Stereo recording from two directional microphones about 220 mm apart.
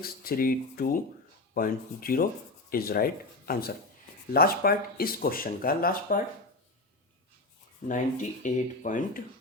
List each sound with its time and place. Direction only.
0.0 s speech: 40° left (ahead or behind)
7.9 s speech: 35° left (ahead or behind)